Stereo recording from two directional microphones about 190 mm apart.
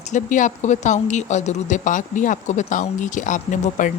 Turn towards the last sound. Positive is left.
turn(degrees=40)  # may be behind; listen again after turning